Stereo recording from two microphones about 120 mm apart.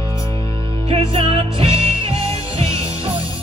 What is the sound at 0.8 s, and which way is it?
Music, 50° right (ahead or behind).